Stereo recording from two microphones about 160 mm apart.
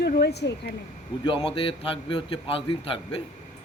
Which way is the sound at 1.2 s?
35° left (ahead or behind).